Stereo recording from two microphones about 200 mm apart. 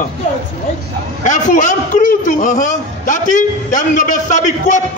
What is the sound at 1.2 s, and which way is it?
A man's voice, 40° left (ahead or behind).